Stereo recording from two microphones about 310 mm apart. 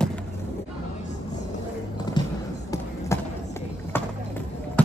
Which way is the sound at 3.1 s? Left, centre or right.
Centre.